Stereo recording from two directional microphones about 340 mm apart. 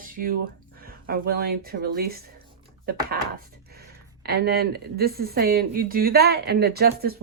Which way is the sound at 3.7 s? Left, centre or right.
Right.